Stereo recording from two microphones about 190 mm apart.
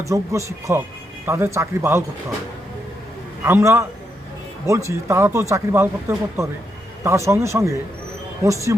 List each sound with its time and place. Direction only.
0.1 s speech: 15° right (ahead or behind)
3.4 s speech: 15° right (ahead or behind)